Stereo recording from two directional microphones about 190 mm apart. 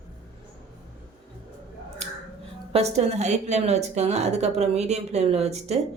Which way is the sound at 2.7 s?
35° right (ahead or behind).